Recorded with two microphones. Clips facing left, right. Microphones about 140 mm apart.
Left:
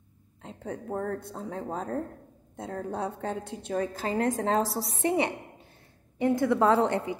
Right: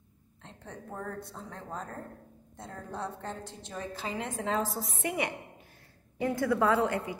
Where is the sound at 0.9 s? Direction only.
50° left (ahead or behind).